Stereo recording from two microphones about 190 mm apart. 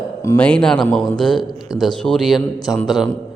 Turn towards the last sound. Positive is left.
turn(degrees=0)  # may be behind; listen again after turning